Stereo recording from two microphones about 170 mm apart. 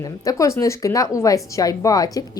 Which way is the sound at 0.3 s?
20° left (ahead or behind).